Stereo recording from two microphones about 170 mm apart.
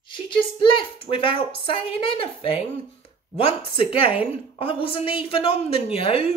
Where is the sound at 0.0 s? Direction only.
30° left (ahead or behind).